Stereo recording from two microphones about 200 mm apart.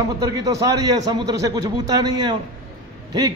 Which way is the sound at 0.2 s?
15° right (ahead or behind).